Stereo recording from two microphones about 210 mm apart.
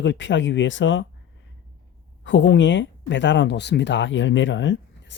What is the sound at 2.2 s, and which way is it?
Speech, 60° left (ahead or behind).